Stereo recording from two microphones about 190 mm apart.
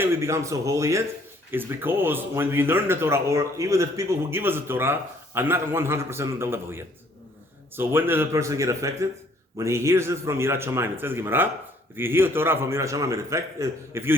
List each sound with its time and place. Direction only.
0.0 s speech: 15° right (ahead or behind)